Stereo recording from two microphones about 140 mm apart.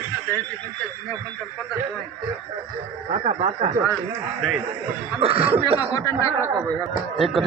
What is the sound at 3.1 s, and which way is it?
Speech, 50° right (ahead or behind).